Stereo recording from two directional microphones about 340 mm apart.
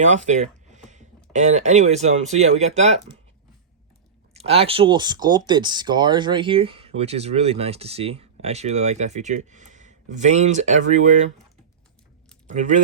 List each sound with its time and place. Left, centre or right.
0.0 s speech: right
4.4 s speech: centre
12.5 s speech: right